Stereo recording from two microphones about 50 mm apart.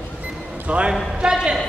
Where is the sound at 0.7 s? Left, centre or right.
Right.